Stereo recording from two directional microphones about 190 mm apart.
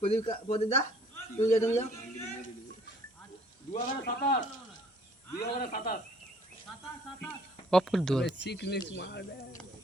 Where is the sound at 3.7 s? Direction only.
45° left (ahead or behind).